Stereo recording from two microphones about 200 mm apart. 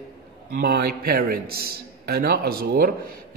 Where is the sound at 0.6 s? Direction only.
50° right (ahead or behind).